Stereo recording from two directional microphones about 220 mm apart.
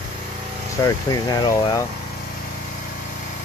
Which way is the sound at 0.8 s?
15° left (ahead or behind).